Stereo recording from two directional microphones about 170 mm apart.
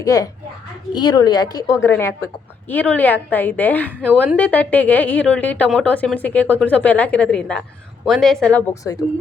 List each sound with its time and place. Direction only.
0.0 s a woman's voice: 20° left (ahead or behind)
8.7 s a woman's voice: 20° left (ahead or behind)